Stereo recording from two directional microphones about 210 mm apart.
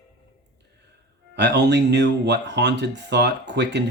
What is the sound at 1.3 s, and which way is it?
Speech, 55° right (ahead or behind).